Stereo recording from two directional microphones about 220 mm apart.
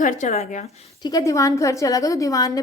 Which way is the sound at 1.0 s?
15° left (ahead or behind).